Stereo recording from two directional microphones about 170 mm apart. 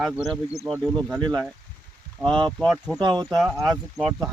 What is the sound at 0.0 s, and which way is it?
Speech, centre (ahead or behind).